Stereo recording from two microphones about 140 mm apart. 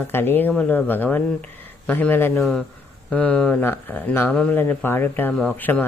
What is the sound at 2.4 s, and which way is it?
Speech, centre (ahead or behind).